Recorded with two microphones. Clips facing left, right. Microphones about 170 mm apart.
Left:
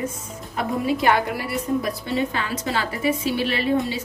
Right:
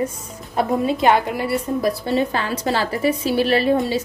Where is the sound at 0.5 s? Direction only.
25° right (ahead or behind).